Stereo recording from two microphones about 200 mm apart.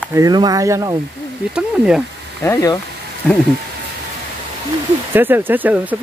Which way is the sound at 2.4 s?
15° left (ahead or behind).